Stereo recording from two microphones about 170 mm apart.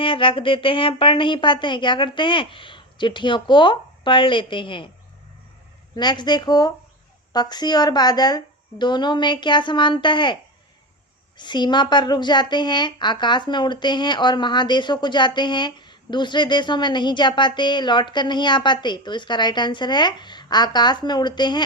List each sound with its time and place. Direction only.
0.0 s a woman's voice: 30° left (ahead or behind)
6.0 s a woman's voice: 25° left (ahead or behind)
11.3 s a woman's voice: 25° left (ahead or behind)